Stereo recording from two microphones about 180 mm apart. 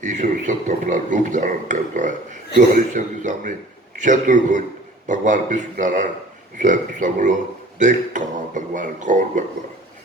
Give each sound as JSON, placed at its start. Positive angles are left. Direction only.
{"t": 0.0, "sound": "speech", "side_deg": -45}